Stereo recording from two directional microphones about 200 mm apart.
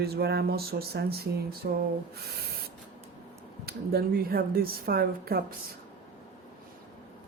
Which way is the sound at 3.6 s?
50° right (ahead or behind).